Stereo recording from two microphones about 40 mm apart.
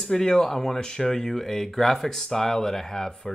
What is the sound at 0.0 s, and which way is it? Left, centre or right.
Speech, centre.